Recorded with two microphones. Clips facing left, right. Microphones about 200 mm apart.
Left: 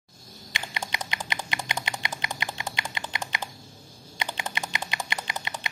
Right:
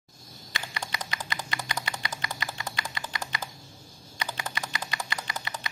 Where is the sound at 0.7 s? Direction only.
20° left (ahead or behind).